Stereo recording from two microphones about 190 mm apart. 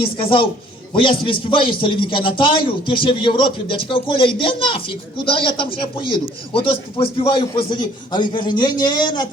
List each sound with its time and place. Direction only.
0.0 s a man's voice: 25° left (ahead or behind)